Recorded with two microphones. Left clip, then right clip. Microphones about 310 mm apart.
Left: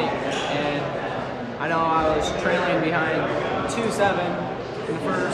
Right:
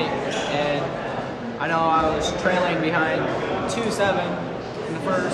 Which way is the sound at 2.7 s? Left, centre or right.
Centre.